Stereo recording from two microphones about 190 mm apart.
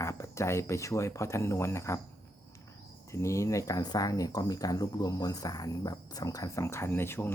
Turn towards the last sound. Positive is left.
turn(degrees=10)  # may be behind; listen again after turning